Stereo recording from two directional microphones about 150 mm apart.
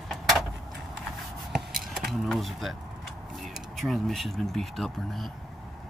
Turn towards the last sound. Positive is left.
turn(degrees=0)  # may be behind; listen again after turning